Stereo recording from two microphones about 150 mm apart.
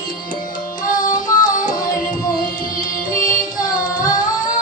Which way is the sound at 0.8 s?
60° left (ahead or behind).